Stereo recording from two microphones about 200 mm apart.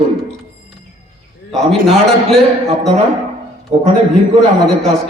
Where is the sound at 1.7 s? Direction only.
Centre (ahead or behind).